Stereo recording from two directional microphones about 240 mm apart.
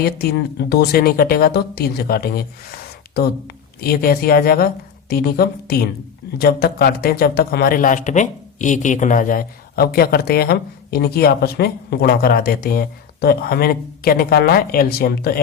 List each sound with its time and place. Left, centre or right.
0.0 s speech: left